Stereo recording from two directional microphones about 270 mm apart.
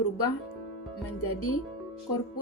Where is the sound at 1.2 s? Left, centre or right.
Left.